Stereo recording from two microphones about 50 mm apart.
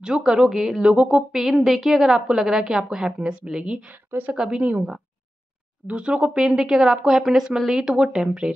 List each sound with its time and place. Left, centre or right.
0.0 s a woman's voice: centre
0.8 s a woman's voice: centre
5.9 s a woman's voice: centre